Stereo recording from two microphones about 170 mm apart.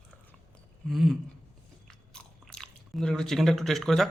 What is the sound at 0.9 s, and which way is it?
Speech, centre (ahead or behind).